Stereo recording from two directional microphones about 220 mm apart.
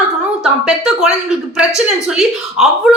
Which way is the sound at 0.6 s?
5° right (ahead or behind).